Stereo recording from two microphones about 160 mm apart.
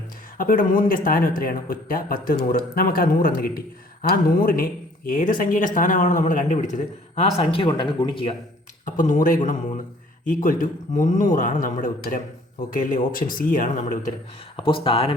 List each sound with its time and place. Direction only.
0.3 s speech: 60° left (ahead or behind); by 8.4 s 35° left (ahead or behind)
8.8 s speech: 55° left (ahead or behind)
14.5 s speech: 35° left (ahead or behind)